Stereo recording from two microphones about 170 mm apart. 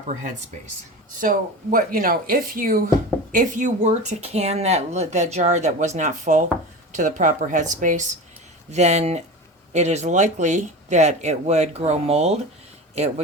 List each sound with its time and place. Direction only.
1.2 s speech: 55° right (ahead or behind); by 12.4 s 40° right (ahead or behind)